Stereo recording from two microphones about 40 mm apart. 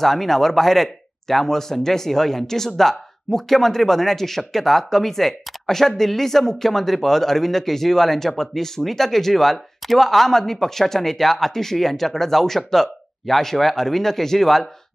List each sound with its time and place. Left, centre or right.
0.0 s speech: centre